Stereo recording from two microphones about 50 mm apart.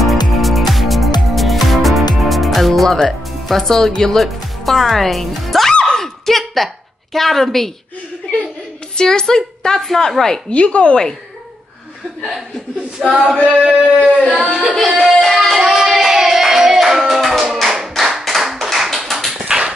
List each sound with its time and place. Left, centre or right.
0.0 s music: centre
5.9 s a sound: centre
8.9 s a woman's voice: centre
10.5 s speech: left
13.0 s speech: centre
13.4 s a sound: right
14.4 s speech: centre
15.1 s music: centre
15.5 s music: centre
17.9 s tap: centre
19.3 s clip-clop: centre